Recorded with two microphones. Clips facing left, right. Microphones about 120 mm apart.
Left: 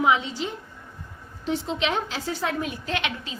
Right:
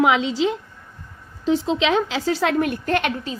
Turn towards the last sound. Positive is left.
turn(degrees=-45)  # may be behind; listen again after turning